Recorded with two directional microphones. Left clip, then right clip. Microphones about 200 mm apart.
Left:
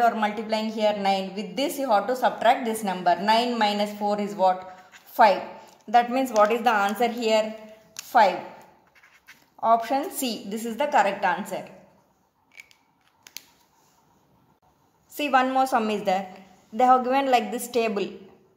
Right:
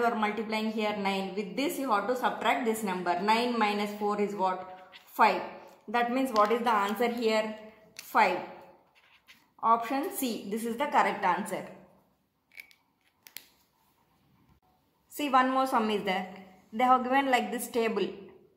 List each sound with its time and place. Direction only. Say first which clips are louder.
0.0 s a woman's voice: left 6 dB; 45° left (ahead or behind)
5.9 s a woman's voice: left 8 dB; 45° left (ahead or behind)
9.6 s a woman's voice: left 5 dB; 50° left (ahead or behind); by 11.6 s 25° left (ahead or behind)
15.1 s a woman's voice: left 4 dB; 25° left (ahead or behind)